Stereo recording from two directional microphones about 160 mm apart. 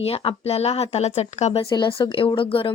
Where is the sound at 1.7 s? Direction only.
30° left (ahead or behind).